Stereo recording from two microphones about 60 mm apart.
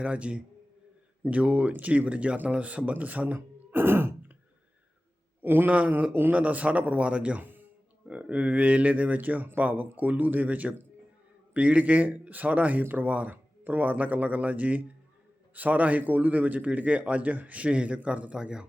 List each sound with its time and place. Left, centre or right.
0.0 s a man's voice: centre
3.3 s a sound: right
5.4 s a man's voice: right; by 18.7 s centre